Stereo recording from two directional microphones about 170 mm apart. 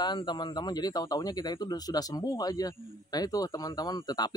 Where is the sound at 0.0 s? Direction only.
25° left (ahead or behind).